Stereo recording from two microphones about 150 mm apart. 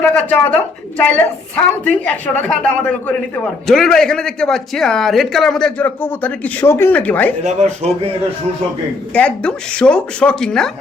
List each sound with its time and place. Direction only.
0.0 s a woman's voice: 10° left (ahead or behind)
7.4 s speech: 50° right (ahead or behind)
9.1 s a woman's voice: 5° left (ahead or behind)